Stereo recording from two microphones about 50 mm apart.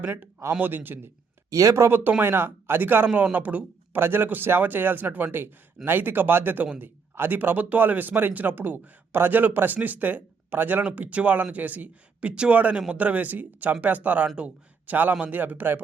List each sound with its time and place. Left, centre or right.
0.6 s speech: right
1.5 s speech: right
1.9 s speech: right
3.3 s speech: right
3.9 s speech: right
12.3 s a man's voice: right